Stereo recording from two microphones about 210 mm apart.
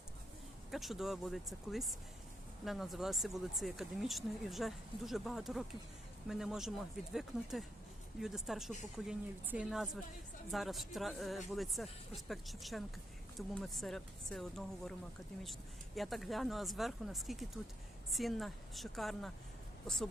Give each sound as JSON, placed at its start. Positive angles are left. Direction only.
{"t": 0.7, "sound": "speech", "side_deg": 0}
{"t": 16.0, "sound": "speech", "side_deg": 0}